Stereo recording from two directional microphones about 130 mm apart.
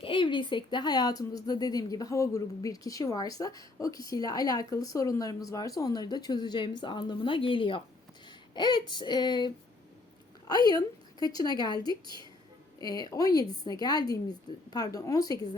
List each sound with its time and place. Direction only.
0.0 s a woman's voice: 40° left (ahead or behind)
10.7 s a woman's voice: 30° left (ahead or behind)